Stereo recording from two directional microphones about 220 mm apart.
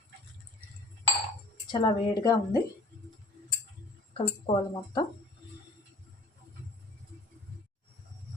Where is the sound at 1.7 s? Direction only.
20° left (ahead or behind).